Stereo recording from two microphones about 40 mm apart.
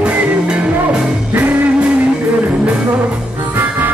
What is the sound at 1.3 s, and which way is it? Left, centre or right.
Music, right.